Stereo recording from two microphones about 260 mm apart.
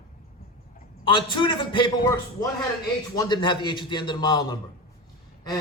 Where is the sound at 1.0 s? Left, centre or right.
Centre.